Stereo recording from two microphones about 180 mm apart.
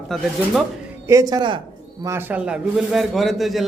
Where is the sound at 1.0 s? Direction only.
20° right (ahead or behind).